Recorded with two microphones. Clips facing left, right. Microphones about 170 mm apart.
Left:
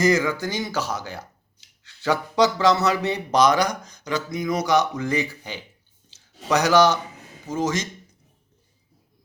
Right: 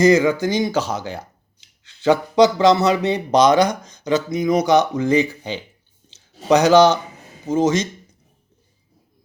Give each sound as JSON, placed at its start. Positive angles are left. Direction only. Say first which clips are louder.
{"t": 0.0, "sound": "speech", "louder": "right 6 dB", "side_deg": -20}
{"t": 6.1, "sound": "a sound", "louder": "right 7 dB", "side_deg": -20}
{"t": 7.4, "sound": "speech", "louder": "right 7 dB", "side_deg": -20}